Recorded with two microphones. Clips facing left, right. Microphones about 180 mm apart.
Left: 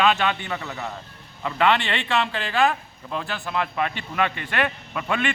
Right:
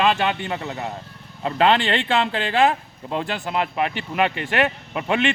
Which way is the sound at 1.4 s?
35° right (ahead or behind).